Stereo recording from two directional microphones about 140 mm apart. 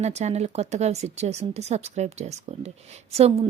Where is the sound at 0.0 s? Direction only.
55° right (ahead or behind).